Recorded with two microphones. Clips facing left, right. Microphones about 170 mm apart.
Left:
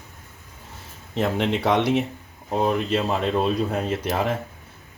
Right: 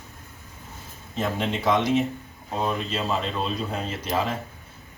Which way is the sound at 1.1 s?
65° left (ahead or behind).